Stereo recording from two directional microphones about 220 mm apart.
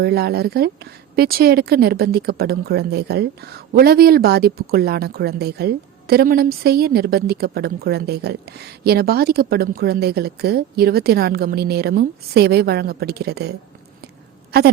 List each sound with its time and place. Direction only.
0.0 s a woman's voice: 45° right (ahead or behind)